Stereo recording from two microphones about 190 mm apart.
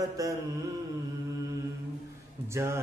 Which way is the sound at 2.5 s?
15° right (ahead or behind).